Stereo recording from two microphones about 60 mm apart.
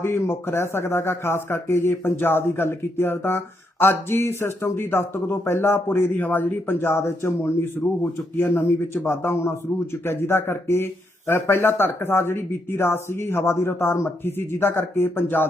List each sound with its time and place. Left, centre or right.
0.0 s a man's voice: left